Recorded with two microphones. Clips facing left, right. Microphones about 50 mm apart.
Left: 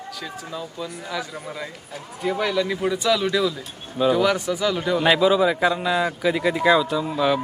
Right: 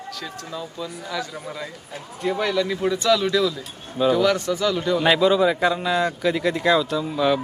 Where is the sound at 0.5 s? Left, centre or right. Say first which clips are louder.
Right 1 dB; centre.